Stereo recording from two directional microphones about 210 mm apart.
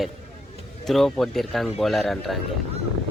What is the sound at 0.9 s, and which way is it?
Speech, centre (ahead or behind).